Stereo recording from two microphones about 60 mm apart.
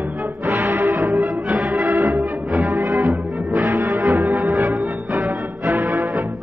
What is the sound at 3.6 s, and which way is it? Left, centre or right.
Music, right.